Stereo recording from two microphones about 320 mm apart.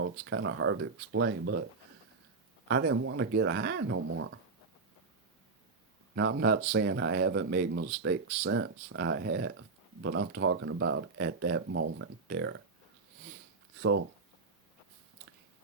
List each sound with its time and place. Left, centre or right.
0.0 s speech: right
2.6 s speech: right
6.1 s speech: right